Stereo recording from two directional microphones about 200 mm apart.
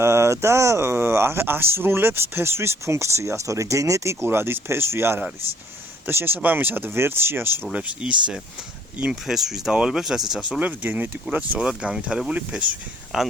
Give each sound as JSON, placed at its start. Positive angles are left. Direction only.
{"t": 0.0, "sound": "speech", "side_deg": -15}